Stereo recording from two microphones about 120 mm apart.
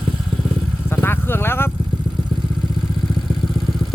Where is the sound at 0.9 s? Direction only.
20° left (ahead or behind).